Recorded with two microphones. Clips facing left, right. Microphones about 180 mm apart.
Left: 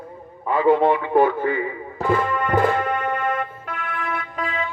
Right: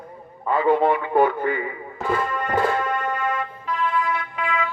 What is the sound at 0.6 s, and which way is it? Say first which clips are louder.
A man's voice: left 2 dB; 20° left (ahead or behind).